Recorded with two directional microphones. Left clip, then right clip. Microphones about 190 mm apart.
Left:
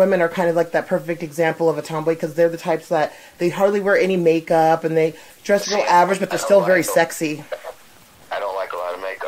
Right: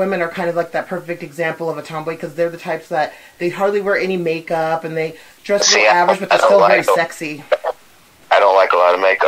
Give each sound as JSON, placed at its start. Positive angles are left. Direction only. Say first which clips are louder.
{"t": 0.1, "sound": "speech", "louder": "left 1 dB", "side_deg": 45}
{"t": 5.6, "sound": "speech", "louder": "right 5 dB", "side_deg": -25}
{"t": 7.0, "sound": "speech", "louder": "left 1 dB", "side_deg": 50}
{"t": 7.4, "sound": "a sound", "louder": "right 13 dB", "side_deg": -25}
{"t": 8.3, "sound": "radio", "louder": "right 14 dB", "side_deg": -25}